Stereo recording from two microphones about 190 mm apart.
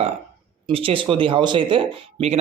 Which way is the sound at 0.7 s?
30° right (ahead or behind).